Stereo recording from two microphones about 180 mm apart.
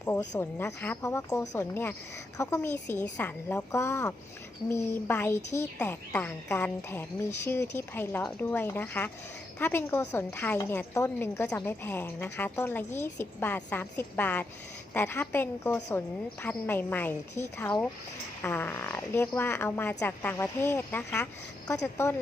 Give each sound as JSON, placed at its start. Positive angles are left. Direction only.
{"t": 0.0, "sound": "a woman's voice", "side_deg": 15}